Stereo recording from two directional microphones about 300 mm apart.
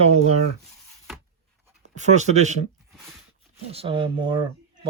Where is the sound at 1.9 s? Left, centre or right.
Right.